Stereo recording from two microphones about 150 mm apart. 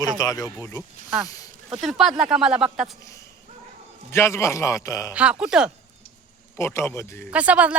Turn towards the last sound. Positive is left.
turn(degrees=-10)  # may be behind; listen again after turning